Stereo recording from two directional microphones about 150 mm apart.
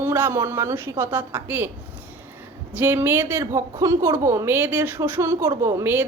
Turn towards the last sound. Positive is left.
turn(degrees=-15)  # may be behind; listen again after turning